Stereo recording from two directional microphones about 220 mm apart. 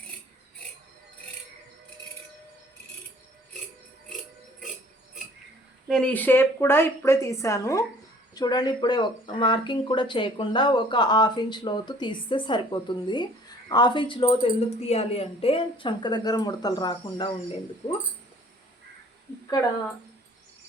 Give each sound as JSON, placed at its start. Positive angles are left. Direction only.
{"t": 5.9, "sound": "a woman's voice", "side_deg": 5}